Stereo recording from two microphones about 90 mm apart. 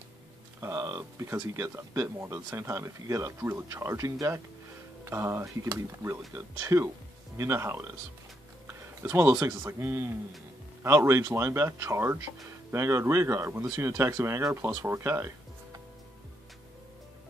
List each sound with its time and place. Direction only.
0.6 s speech: 35° right (ahead or behind)